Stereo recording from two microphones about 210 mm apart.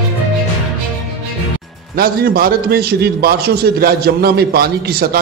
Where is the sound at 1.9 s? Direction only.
45° right (ahead or behind).